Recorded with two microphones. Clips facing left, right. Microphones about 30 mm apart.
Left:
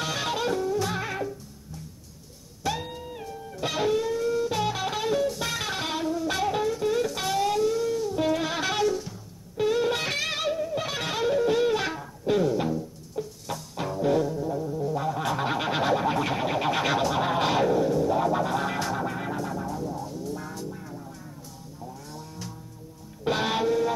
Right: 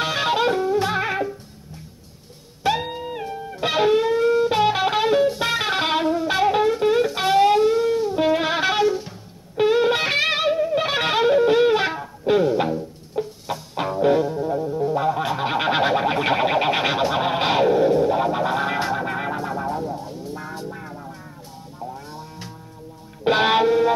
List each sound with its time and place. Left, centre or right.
0.0 s music: right
2.6 s music: right
6.2 s music: right